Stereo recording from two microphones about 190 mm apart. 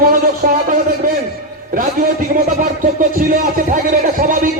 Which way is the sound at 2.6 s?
45° right (ahead or behind).